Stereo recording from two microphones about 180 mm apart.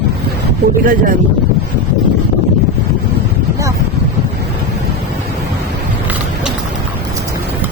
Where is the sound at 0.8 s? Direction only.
50° right (ahead or behind).